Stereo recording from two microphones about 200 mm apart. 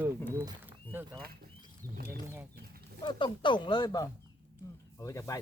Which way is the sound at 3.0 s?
25° left (ahead or behind).